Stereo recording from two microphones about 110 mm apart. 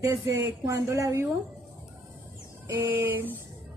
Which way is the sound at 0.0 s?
30° right (ahead or behind).